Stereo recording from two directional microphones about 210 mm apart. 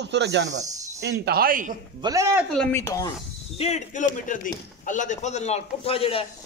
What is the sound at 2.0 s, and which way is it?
Speech, 15° right (ahead or behind).